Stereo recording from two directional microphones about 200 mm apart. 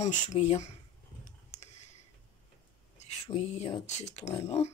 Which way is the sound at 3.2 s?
30° left (ahead or behind).